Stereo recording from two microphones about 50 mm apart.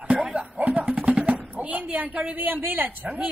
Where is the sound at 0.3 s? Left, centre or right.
Right.